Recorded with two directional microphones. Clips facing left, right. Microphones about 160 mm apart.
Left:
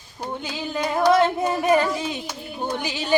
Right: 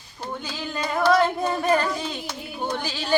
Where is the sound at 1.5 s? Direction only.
10° left (ahead or behind).